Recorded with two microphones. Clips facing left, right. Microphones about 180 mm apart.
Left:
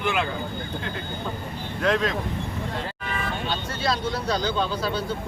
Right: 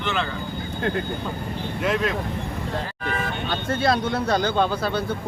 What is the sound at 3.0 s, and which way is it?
Speech, 55° right (ahead or behind).